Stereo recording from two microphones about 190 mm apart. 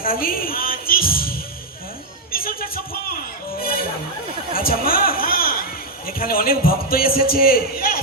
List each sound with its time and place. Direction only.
0.0 s music: 50° left (ahead or behind)
4.5 s a sound: 50° left (ahead or behind)
6.1 s a man's voice: 50° left (ahead or behind)